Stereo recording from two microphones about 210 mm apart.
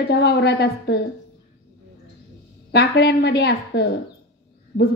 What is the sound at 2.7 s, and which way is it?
A woman's voice, 50° left (ahead or behind).